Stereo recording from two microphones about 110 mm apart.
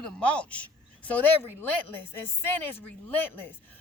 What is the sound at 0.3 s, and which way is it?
Speech, 10° left (ahead or behind).